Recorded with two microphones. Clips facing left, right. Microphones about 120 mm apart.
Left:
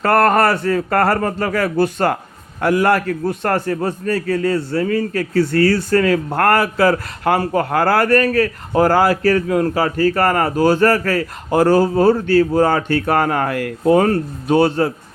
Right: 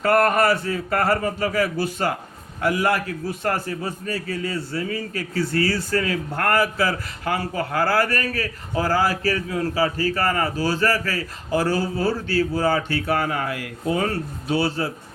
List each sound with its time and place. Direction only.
0.0 s a man's voice: 65° left (ahead or behind)
13.8 s speech: 45° left (ahead or behind)